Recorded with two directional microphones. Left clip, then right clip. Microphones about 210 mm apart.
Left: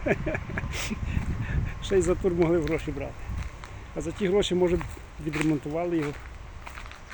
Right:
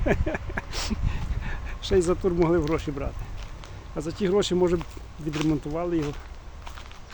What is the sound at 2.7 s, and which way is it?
Speech, 15° right (ahead or behind).